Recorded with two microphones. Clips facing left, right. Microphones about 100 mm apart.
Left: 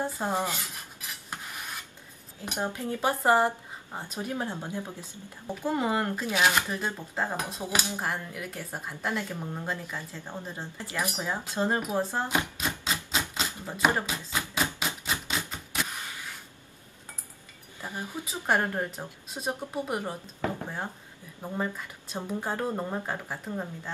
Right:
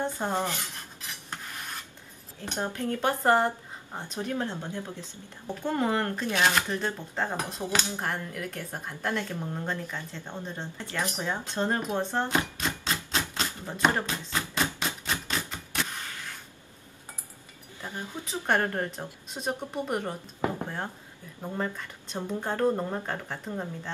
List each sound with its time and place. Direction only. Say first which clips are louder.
0.0 s speech: even; 5° left (ahead or behind)
2.4 s speech: right 1 dB; 10° left (ahead or behind)
15.1 s a sound: even; 10° left (ahead or behind)
17.8 s speech: left 1 dB; 10° left (ahead or behind)